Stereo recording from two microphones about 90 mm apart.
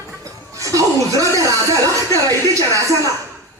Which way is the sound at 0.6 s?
40° right (ahead or behind).